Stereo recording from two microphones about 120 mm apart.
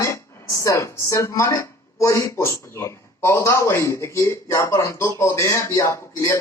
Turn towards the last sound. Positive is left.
turn(degrees=20)  # may be behind; listen again after turning